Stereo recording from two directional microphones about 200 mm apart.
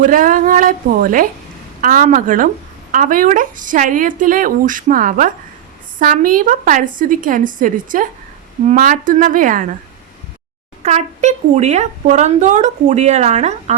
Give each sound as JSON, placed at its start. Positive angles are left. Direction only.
{"t": 0.0, "sound": "a woman's voice", "side_deg": -40}
{"t": 10.8, "sound": "a woman's voice", "side_deg": -35}